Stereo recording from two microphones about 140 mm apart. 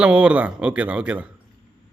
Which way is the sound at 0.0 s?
10° right (ahead or behind).